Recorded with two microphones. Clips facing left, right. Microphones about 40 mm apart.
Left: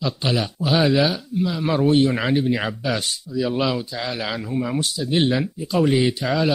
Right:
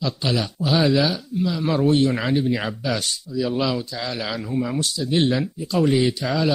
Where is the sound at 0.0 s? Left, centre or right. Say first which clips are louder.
Left 1 dB; centre.